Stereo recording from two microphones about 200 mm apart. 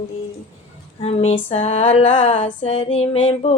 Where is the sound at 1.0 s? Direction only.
30° left (ahead or behind).